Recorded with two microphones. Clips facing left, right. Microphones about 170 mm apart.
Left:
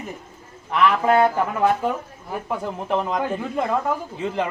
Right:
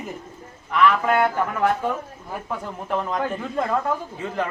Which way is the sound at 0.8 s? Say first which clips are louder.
Left 2 dB; 20° left (ahead or behind).